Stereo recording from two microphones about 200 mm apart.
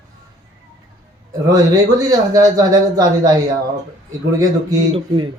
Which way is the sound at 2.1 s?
20° right (ahead or behind).